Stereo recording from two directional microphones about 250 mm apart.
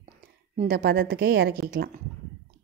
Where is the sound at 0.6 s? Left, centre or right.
Right.